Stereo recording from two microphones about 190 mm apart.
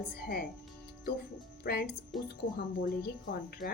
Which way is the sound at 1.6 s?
55° left (ahead or behind).